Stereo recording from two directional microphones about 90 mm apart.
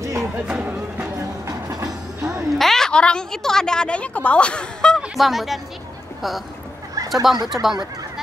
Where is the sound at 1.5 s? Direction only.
45° right (ahead or behind).